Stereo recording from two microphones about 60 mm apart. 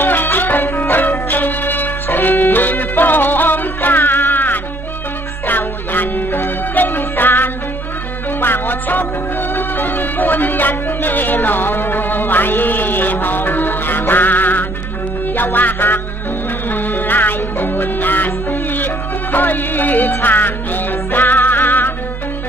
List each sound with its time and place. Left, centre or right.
0.0 s music: left